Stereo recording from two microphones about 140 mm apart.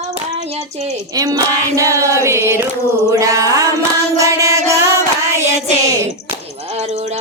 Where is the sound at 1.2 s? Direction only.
25° right (ahead or behind).